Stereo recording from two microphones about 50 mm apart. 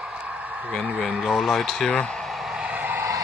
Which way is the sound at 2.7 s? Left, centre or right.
Right.